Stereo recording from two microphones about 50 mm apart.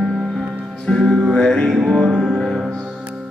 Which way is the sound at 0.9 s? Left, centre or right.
Left.